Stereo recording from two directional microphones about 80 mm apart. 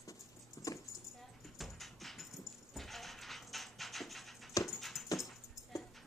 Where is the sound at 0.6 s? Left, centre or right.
Left.